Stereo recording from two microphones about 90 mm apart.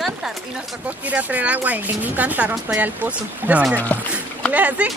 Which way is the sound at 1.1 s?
15° right (ahead or behind).